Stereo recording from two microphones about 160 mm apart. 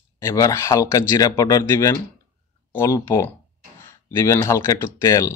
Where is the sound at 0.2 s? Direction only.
20° left (ahead or behind).